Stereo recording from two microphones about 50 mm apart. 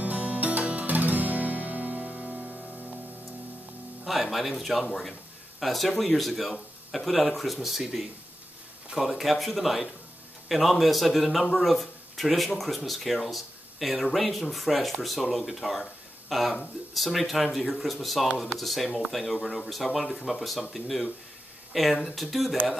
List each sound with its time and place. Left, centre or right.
0.0 s music: right
4.0 s speech: centre